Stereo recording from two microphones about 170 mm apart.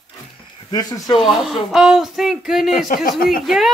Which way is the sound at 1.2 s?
Centre (ahead or behind).